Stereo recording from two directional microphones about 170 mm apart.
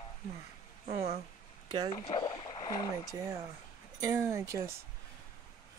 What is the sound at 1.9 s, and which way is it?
Speech, 30° left (ahead or behind).